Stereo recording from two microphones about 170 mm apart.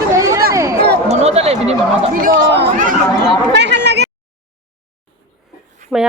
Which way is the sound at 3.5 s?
85° right.